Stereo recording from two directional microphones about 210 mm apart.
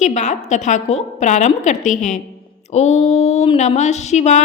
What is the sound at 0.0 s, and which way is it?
A woman's voice, 35° left (ahead or behind).